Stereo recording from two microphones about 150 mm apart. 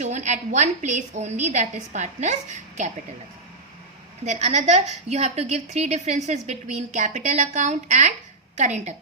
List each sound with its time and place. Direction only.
0.0 s a woman's voice: 50° right (ahead or behind)
4.3 s a woman's voice: 50° right (ahead or behind)